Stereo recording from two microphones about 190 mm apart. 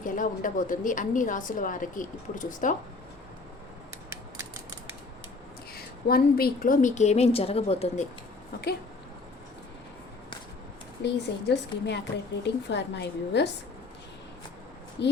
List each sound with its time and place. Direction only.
0.0 s a woman's voice: 45° left (ahead or behind)
5.7 s a woman's voice: 55° left (ahead or behind); by 8.0 s 30° left (ahead or behind)
11.0 s a woman's voice: 65° left (ahead or behind)
15.0 s a woman's voice: 65° left (ahead or behind)